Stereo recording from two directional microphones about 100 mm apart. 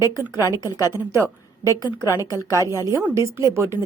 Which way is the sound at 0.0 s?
25° right (ahead or behind).